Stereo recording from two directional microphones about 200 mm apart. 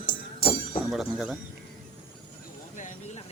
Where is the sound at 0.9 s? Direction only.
Centre (ahead or behind).